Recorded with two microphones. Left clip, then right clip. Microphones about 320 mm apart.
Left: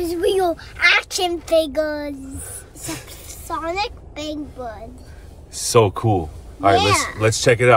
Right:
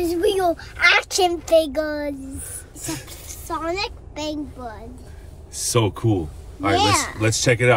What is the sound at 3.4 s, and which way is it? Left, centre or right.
Speech, centre.